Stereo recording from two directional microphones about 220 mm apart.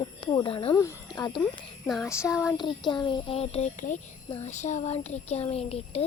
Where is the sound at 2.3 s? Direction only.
5° right (ahead or behind).